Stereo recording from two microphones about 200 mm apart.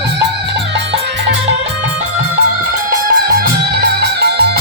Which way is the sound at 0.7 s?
60° right (ahead or behind).